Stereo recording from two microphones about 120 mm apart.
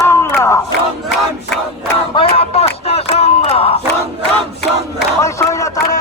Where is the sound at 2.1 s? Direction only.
55° left (ahead or behind).